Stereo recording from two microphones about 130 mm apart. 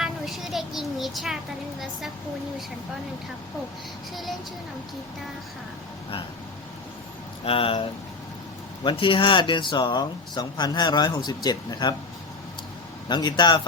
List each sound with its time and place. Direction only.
0.0 s a sound: centre (ahead or behind)
4.1 s speech: centre (ahead or behind)
7.4 s speech: 45° left (ahead or behind)
13.1 s speech: 35° left (ahead or behind)